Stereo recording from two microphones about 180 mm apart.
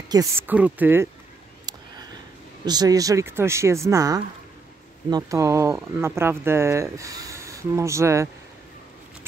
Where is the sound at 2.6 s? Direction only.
20° right (ahead or behind).